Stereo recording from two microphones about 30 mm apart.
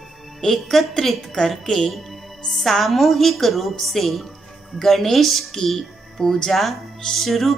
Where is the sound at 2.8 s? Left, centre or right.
Centre.